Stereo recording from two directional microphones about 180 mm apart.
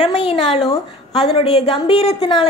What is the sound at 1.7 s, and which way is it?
Speech, 30° left (ahead or behind).